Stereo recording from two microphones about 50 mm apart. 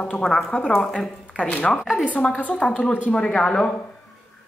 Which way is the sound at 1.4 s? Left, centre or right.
Left.